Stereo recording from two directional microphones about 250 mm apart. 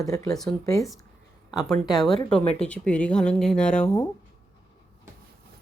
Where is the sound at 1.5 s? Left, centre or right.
Centre.